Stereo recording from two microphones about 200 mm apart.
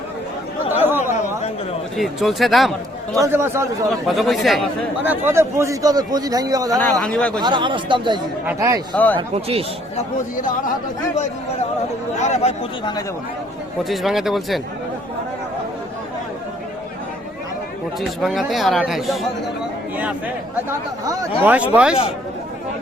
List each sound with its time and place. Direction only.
0.9 s chatter: 10° right (ahead or behind)
2.0 s speech: centre (ahead or behind)
3.2 s a man's voice: 10° right (ahead or behind)
4.0 s speech: centre (ahead or behind)
5.2 s a man's voice: 15° right (ahead or behind)
7.0 s speech: 5° left (ahead or behind)
7.3 s a man's voice: 20° right (ahead or behind)
9.1 s speech: 30° right (ahead or behind)
12.2 s speech: 35° left (ahead or behind)
13.8 s speech: centre (ahead or behind)
18.2 s a man's voice: centre (ahead or behind)
21.0 s a man's voice: 20° right (ahead or behind)